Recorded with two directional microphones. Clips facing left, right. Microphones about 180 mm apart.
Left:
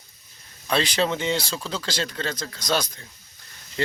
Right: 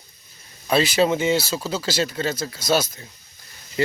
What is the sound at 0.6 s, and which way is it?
Speech, 5° right (ahead or behind).